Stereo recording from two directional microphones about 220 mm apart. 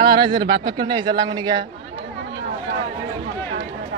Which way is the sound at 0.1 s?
20° right (ahead or behind).